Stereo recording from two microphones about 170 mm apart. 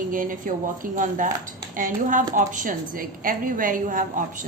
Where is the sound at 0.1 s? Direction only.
55° right (ahead or behind).